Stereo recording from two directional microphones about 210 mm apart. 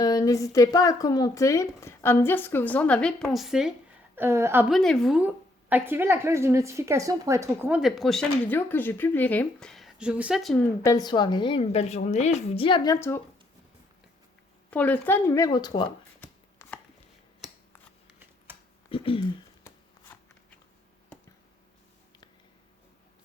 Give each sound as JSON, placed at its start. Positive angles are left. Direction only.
{"t": 0.0, "sound": "speech", "side_deg": 15}
{"t": 4.7, "sound": "a woman's voice", "side_deg": 0}
{"t": 10.8, "sound": "a woman's voice", "side_deg": 20}
{"t": 14.7, "sound": "speech", "side_deg": 5}
{"t": 16.2, "sound": "chopping", "side_deg": 5}
{"t": 18.9, "sound": "speech", "side_deg": 25}
{"t": 19.6, "sound": "shuffling cards", "side_deg": 10}